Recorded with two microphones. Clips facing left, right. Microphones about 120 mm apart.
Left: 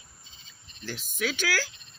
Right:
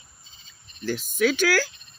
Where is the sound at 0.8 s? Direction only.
50° right (ahead or behind).